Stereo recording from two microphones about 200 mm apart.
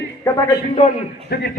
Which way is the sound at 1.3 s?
50° left (ahead or behind).